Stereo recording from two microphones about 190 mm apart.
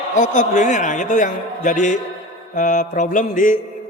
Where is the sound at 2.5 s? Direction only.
40° left (ahead or behind).